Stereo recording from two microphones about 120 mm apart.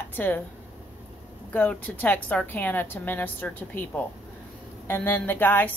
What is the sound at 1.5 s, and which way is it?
A woman's voice, 15° left (ahead or behind).